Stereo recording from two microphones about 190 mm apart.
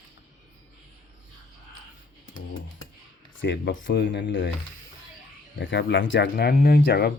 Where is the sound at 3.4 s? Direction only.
70° left (ahead or behind).